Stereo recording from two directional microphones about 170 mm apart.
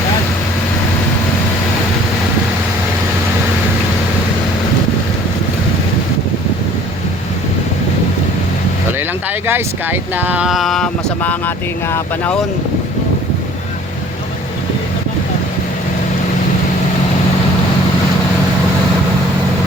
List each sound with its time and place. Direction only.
9.5 s speech: 10° right (ahead or behind); by 12.4 s 10° left (ahead or behind)